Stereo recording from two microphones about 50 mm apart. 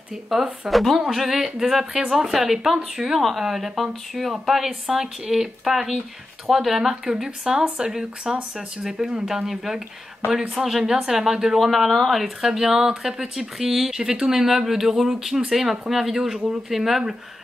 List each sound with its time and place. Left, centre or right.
0.3 s speech: centre
7.1 s speech: centre
12.4 s speech: centre